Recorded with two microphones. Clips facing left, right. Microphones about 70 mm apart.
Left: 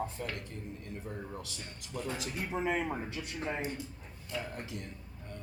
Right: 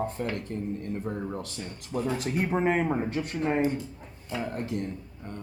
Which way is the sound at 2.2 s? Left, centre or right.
Right.